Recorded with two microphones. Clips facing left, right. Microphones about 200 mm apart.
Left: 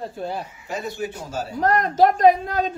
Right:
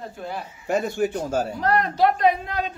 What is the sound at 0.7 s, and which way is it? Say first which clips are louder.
Speech: right 7 dB; 50° right (ahead or behind).